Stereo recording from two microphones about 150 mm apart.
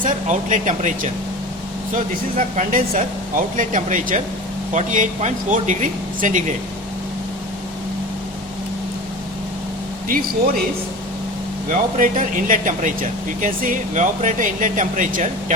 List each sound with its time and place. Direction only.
0.0 s speech: 55° right (ahead or behind)
10.1 s speech: 75° right (ahead or behind)
11.7 s speech: 65° right (ahead or behind)